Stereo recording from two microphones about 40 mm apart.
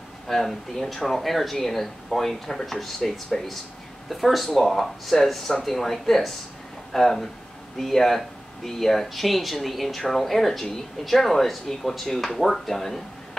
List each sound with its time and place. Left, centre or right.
0.3 s speech: centre